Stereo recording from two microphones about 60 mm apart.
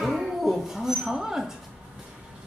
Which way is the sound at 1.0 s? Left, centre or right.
Centre.